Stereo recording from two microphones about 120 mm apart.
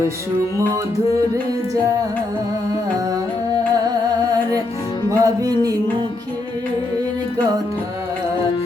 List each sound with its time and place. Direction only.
3.8 s music: 30° right (ahead or behind)